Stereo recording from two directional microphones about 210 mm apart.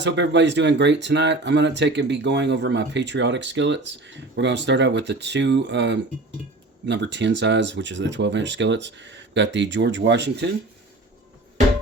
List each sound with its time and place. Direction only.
0.0 s speech: 55° right (ahead or behind)